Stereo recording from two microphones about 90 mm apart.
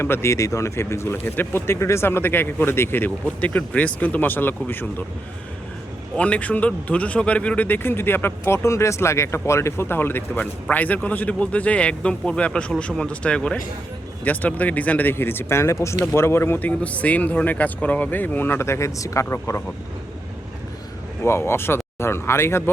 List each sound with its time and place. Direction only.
0.0 s speech: 30° left (ahead or behind)
6.1 s a man's voice: 15° left (ahead or behind); by 19.6 s 30° left (ahead or behind)
21.2 s speech: 30° left (ahead or behind)